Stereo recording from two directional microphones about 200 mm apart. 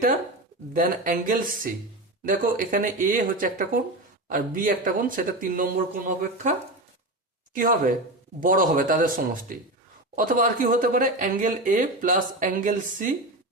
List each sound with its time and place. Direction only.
0.7 s speech: 40° right (ahead or behind)
7.5 s speech: 45° right (ahead or behind)